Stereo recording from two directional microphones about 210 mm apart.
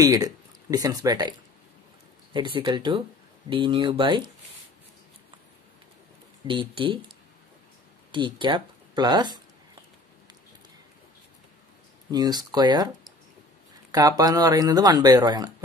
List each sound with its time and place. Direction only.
0.0 s speech: 15° right (ahead or behind)
2.3 s speech: 20° right (ahead or behind)
6.4 s speech: 25° right (ahead or behind)
8.1 s speech: 25° right (ahead or behind)
12.1 s speech: 20° right (ahead or behind)
13.9 s speech: 15° right (ahead or behind)